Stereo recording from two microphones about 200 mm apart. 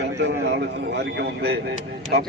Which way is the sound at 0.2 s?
65° right (ahead or behind).